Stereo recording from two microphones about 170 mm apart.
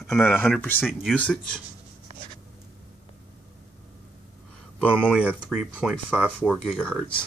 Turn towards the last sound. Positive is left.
turn(degrees=5)  # may be behind; listen again after turning